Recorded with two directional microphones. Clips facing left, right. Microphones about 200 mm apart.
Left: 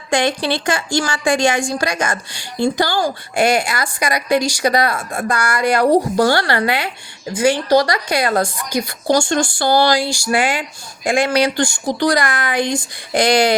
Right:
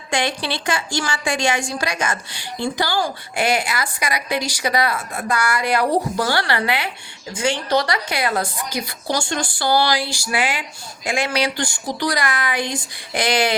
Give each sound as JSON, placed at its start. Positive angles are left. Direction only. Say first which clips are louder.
{"t": 0.1, "sound": "speech", "louder": "left 5 dB", "side_deg": 45}